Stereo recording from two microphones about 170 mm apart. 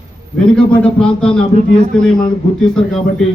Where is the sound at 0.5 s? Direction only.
5° left (ahead or behind).